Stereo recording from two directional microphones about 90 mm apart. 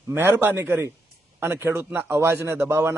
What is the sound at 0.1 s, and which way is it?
A man's voice, 25° right (ahead or behind).